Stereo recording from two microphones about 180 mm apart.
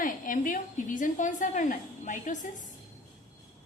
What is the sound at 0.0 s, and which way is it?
A woman's voice, 50° left (ahead or behind).